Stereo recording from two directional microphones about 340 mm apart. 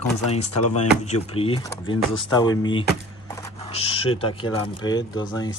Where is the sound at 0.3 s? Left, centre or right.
Centre.